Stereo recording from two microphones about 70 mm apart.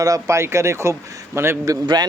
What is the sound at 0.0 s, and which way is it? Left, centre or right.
Speech, right.